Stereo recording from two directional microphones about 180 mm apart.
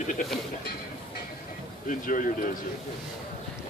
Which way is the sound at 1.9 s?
45° left (ahead or behind).